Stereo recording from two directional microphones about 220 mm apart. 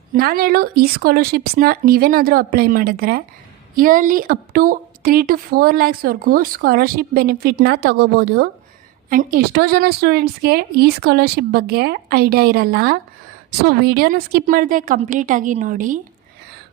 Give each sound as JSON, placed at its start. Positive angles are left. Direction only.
{"t": 0.1, "sound": "a woman's voice", "side_deg": -40}